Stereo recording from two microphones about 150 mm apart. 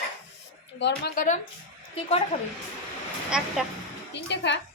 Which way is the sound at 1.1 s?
55° left (ahead or behind).